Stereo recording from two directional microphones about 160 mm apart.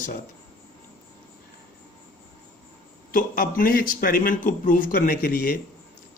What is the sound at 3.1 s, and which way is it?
Speech, 60° left (ahead or behind).